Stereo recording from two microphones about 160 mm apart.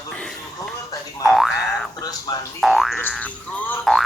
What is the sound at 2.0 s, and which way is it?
Speech, 25° left (ahead or behind).